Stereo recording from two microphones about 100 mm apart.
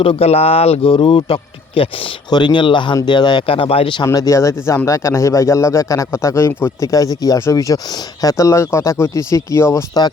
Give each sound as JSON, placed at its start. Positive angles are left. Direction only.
{"t": 0.0, "sound": "speech", "side_deg": 80}
{"t": 2.3, "sound": "speech", "side_deg": 50}
{"t": 3.4, "sound": "speech", "side_deg": 70}
{"t": 4.0, "sound": "speech", "side_deg": 35}